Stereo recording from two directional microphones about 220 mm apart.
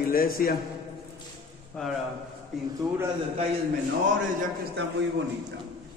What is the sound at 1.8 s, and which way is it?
Speech, 5° left (ahead or behind).